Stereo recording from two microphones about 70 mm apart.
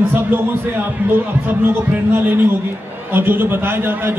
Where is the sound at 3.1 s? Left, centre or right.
Right.